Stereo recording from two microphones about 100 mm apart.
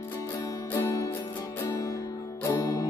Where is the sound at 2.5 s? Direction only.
40° left (ahead or behind).